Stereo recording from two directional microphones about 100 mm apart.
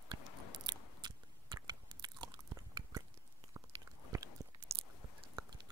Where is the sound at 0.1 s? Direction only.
45° right (ahead or behind).